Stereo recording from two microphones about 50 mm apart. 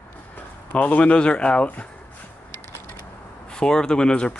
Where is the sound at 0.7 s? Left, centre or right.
Left.